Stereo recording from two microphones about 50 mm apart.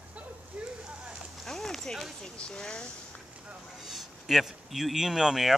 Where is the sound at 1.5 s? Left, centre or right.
Centre.